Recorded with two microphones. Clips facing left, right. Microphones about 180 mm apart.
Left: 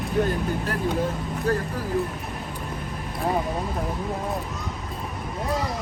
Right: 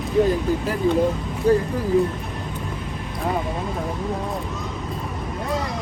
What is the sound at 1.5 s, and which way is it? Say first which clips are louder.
Speech: right 7 dB; 15° right (ahead or behind).